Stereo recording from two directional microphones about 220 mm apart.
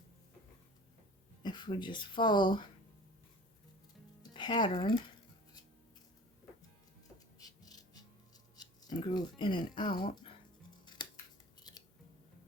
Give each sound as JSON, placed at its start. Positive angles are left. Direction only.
{"t": 1.4, "sound": "speech", "side_deg": 20}
{"t": 4.2, "sound": "speech", "side_deg": 20}
{"t": 7.3, "sound": "music", "side_deg": 15}
{"t": 8.5, "sound": "speech", "side_deg": 20}
{"t": 11.0, "sound": "scissors", "side_deg": 20}